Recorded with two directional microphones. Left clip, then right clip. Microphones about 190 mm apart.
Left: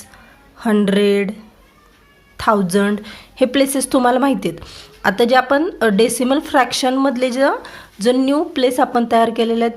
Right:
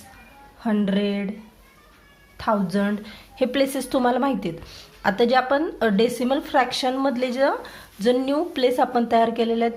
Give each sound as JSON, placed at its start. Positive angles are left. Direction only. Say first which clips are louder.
{"t": 0.6, "sound": "speech", "louder": "left 9 dB", "side_deg": 40}
{"t": 2.4, "sound": "a woman's voice", "louder": "left 8 dB", "side_deg": 40}